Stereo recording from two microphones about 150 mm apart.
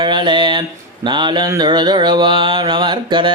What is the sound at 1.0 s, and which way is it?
Mantra, 30° right (ahead or behind).